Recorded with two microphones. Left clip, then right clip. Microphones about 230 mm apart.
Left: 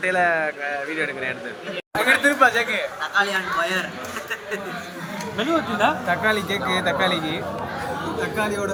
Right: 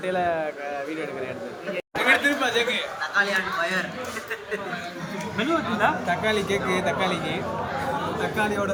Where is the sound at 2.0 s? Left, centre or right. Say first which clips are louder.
Left 4 dB; centre.